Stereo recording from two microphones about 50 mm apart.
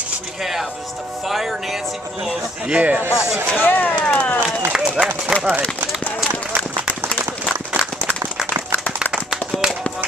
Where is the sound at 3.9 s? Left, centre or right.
Left.